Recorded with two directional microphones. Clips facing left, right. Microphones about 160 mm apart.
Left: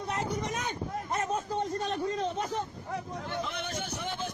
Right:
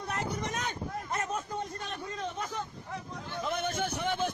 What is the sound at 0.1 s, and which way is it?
Vehicle, 20° left (ahead or behind).